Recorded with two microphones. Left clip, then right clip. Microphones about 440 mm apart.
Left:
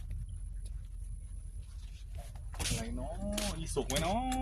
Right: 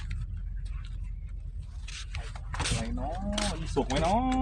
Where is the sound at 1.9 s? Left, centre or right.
Centre.